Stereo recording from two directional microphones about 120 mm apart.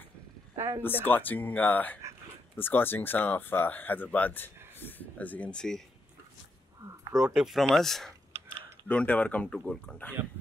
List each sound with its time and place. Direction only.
0.6 s speech: 20° right (ahead or behind)
0.8 s speech: 15° left (ahead or behind)
7.1 s speech: 5° right (ahead or behind)